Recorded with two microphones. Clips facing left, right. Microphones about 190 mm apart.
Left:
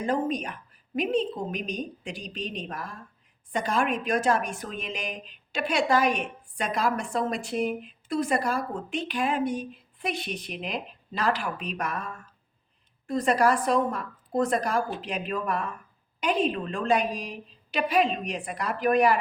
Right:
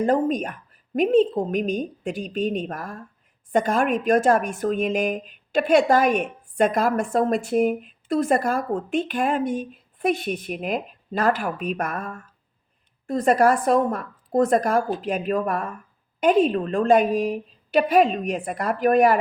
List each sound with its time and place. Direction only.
0.0 s speech: 50° right (ahead or behind)